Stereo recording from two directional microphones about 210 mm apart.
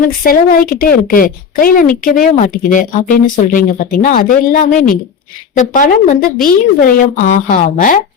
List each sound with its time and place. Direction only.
0.2 s a woman's voice: 45° left (ahead or behind)